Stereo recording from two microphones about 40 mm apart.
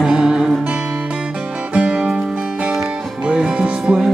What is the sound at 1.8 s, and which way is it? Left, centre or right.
Music, right.